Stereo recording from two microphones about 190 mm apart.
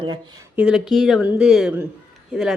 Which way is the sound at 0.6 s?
5° right (ahead or behind).